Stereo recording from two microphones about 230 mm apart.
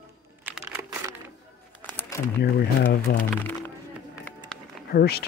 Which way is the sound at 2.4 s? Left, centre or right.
Left.